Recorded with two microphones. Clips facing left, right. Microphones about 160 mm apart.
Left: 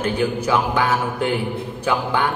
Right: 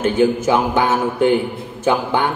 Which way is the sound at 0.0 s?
25° right (ahead or behind).